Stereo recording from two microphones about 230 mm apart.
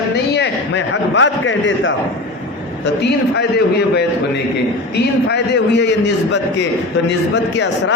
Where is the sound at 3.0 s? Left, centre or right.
Left.